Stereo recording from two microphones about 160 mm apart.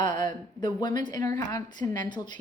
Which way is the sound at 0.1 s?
55° right (ahead or behind).